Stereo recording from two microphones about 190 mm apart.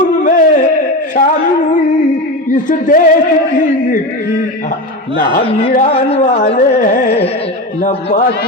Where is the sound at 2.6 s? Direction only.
45° left (ahead or behind).